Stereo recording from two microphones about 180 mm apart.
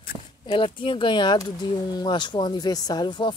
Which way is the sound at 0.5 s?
30° left (ahead or behind).